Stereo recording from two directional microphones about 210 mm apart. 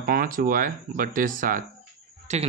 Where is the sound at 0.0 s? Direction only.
45° right (ahead or behind).